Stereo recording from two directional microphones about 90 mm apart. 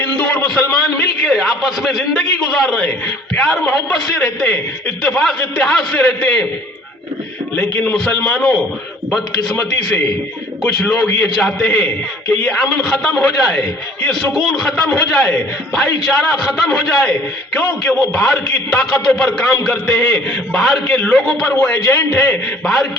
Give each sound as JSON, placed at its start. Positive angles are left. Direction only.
{"t": 0.0, "sound": "a man's voice", "side_deg": 15}
{"t": 0.7, "sound": "a man's voice", "side_deg": 5}
{"t": 7.5, "sound": "a man's voice", "side_deg": 15}
{"t": 21.5, "sound": "a man's voice", "side_deg": 20}
{"t": 22.6, "sound": "a man's voice", "side_deg": 5}